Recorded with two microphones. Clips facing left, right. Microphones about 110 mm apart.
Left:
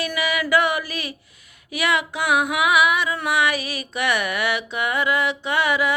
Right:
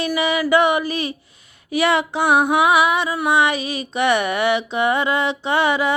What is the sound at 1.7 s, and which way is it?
Music, 30° right (ahead or behind).